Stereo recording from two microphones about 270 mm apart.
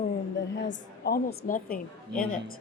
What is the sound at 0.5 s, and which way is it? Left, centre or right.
A woman's voice, left.